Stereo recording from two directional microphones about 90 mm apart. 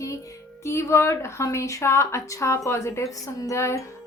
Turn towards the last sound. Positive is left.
turn(degrees=35)  # may be behind; listen again after turning